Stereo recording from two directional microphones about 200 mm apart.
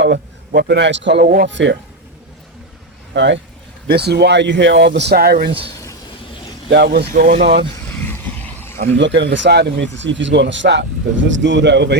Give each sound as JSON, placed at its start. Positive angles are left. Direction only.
{"t": 0.0, "sound": "a man's voice", "side_deg": -60}
{"t": 1.2, "sound": "speech", "side_deg": -45}
{"t": 1.5, "sound": "speech", "side_deg": -65}
{"t": 3.2, "sound": "speech", "side_deg": -60}
{"t": 6.7, "sound": "speech", "side_deg": -55}
{"t": 7.1, "sound": "speech", "side_deg": -45}
{"t": 8.1, "sound": "vehicle", "side_deg": 10}
{"t": 8.8, "sound": "speech", "side_deg": -65}